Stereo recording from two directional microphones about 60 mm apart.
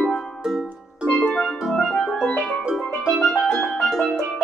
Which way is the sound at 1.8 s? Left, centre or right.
Centre.